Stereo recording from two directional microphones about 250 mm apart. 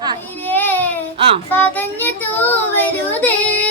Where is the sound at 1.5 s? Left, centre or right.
Centre.